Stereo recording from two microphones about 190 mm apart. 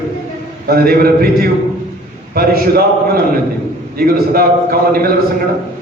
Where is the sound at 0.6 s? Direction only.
55° right (ahead or behind).